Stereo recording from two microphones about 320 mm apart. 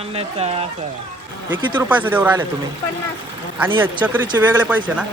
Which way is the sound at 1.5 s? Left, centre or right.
Centre.